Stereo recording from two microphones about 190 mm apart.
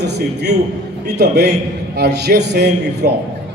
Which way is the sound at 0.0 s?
60° right (ahead or behind).